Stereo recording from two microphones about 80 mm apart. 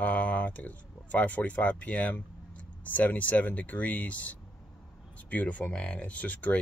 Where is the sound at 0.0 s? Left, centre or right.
Centre.